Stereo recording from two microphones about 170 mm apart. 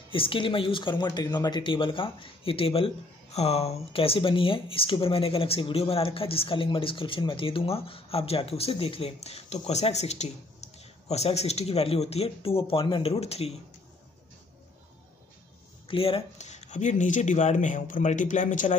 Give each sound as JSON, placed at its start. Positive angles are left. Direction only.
{"t": 0.1, "sound": "speech", "side_deg": 30}
{"t": 15.9, "sound": "speech", "side_deg": 35}